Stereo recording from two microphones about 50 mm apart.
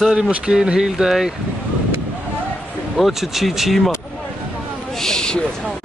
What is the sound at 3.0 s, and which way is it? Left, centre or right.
Speech, centre.